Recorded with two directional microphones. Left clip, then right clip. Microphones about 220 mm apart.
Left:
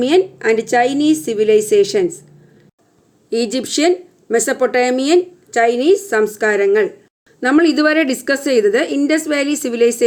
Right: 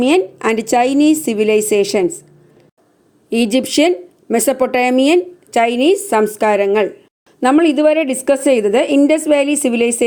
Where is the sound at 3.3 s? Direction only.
10° left (ahead or behind).